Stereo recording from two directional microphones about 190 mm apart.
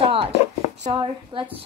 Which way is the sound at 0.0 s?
30° right (ahead or behind).